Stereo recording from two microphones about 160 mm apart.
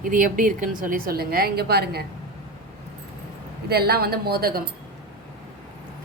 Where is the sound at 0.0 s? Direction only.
60° right (ahead or behind); by 2.0 s 80° right.